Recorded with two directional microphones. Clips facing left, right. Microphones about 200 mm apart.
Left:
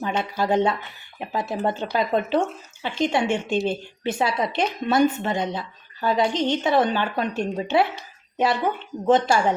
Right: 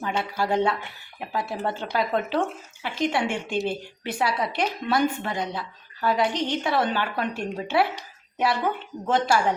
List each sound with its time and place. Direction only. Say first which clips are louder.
0.2 s a woman's voice: left 2 dB; 20° left (ahead or behind)